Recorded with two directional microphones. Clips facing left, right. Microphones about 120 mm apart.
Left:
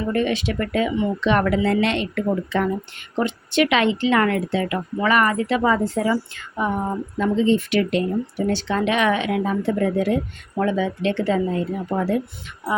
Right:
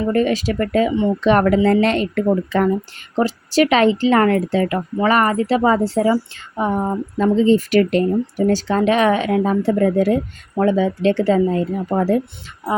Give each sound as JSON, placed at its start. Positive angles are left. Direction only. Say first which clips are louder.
{"t": 0.1, "sound": "a woman's voice", "louder": "right 3 dB", "side_deg": -40}